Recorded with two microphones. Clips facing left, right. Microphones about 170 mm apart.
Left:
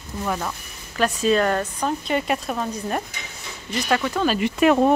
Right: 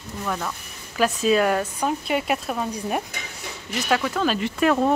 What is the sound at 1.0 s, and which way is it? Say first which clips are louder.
Speech: even; 5° right (ahead or behind).